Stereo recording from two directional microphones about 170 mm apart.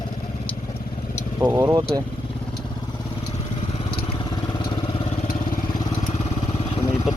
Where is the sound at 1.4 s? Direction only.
15° right (ahead or behind).